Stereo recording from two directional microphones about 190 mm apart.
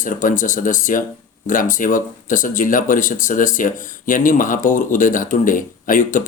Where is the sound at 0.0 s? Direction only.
45° left (ahead or behind).